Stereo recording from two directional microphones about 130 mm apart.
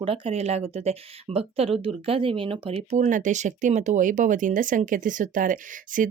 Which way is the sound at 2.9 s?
75° right (ahead or behind).